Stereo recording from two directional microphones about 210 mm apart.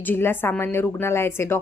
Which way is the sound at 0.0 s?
10° left (ahead or behind).